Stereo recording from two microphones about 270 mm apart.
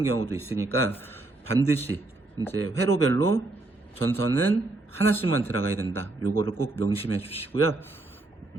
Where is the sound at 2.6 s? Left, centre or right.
Right.